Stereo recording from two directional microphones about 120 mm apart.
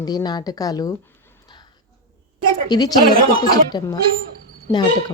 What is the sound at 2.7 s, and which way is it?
Speech, 35° left (ahead or behind).